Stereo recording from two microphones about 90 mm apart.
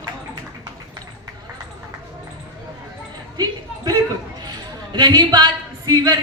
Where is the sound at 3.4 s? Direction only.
50° right (ahead or behind).